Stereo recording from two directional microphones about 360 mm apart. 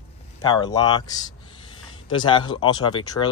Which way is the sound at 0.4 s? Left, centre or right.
Centre.